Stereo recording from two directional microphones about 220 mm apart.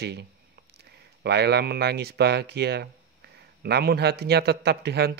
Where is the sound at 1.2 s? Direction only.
50° right (ahead or behind).